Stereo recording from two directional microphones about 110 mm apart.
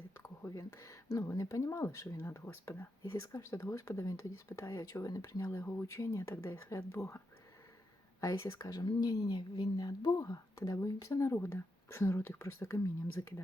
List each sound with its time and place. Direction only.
0.2 s speech: 30° left (ahead or behind)
8.2 s a woman's voice: 30° left (ahead or behind)